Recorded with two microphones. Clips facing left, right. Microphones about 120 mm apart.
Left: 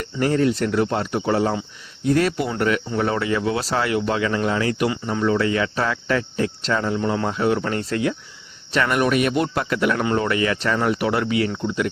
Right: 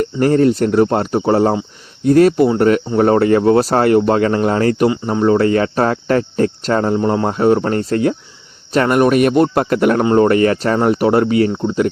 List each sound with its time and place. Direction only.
0.0 s speech: 45° right (ahead or behind)
10.0 s speech: 30° right (ahead or behind)
10.2 s speech: 45° right (ahead or behind)